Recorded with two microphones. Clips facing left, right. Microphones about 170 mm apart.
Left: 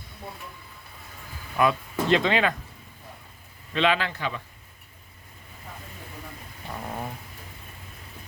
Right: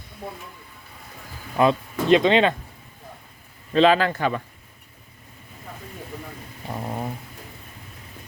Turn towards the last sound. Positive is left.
turn(degrees=-20)  # may be behind; listen again after turning